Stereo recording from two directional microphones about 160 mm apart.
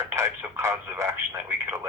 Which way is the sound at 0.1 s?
15° right (ahead or behind).